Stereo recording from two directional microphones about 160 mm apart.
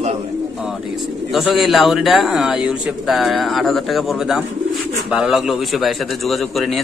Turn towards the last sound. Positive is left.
turn(degrees=0)  # may be behind; listen again after turning